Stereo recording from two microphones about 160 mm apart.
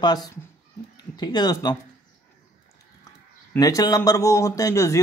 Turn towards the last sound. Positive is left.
turn(degrees=20)  # may be behind; listen again after turning